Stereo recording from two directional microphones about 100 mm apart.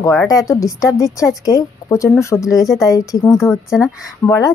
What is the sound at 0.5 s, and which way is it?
A woman's voice, 30° left (ahead or behind).